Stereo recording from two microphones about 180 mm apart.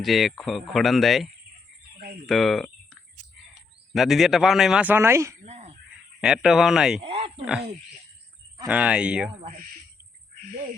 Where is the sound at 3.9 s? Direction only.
Centre (ahead or behind).